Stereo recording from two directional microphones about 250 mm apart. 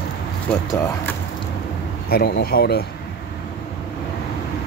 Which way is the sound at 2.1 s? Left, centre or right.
Left.